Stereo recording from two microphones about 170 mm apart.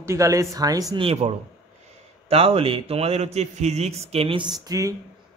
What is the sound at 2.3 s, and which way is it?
A man's voice, 35° right (ahead or behind).